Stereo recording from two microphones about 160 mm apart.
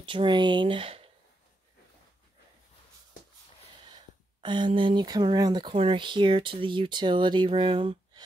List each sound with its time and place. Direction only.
0.0 s speech: 30° right (ahead or behind)
3.8 s speech: 30° right (ahead or behind)